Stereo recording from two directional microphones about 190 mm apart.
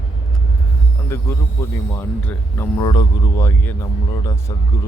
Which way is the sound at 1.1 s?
15° left (ahead or behind).